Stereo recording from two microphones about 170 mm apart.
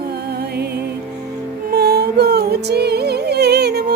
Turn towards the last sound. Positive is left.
turn(degrees=-70)  # may be behind; listen again after turning